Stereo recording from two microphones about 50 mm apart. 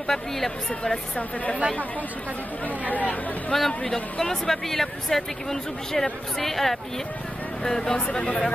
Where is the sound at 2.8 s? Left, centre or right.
Left.